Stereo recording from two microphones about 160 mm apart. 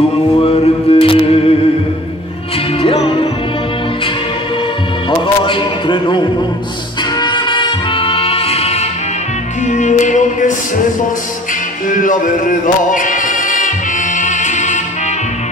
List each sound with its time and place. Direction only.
0.4 s music: 40° left (ahead or behind)
2.8 s music: 35° left (ahead or behind)
5.1 s music: 30° left (ahead or behind); by 10.5 s 50° left (ahead or behind)
11.9 s music: 55° left (ahead or behind)